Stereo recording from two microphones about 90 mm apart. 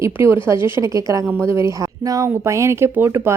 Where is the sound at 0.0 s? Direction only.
30° right (ahead or behind).